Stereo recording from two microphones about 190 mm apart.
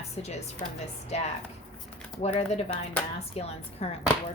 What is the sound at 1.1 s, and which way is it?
Speech, 35° left (ahead or behind).